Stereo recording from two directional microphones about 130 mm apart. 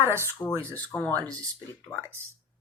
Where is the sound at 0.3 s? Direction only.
15° left (ahead or behind).